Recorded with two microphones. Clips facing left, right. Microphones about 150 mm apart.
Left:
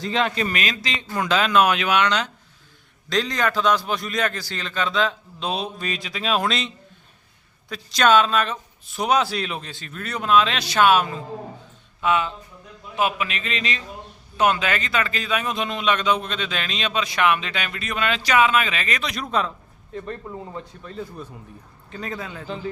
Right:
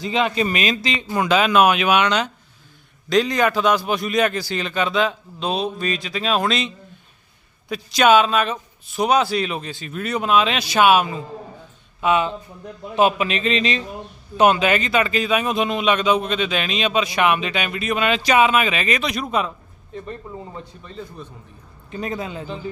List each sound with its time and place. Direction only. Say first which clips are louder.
0.0 s a man's voice: right 3 dB; 10° right (ahead or behind)
5.5 s speech: right 4 dB; centre (ahead or behind)
7.7 s a man's voice: right 3 dB; 10° right (ahead or behind)
21.8 s a man's voice: right 5 dB; 15° right (ahead or behind)